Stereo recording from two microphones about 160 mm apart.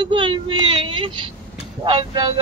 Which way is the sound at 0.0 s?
30° right (ahead or behind).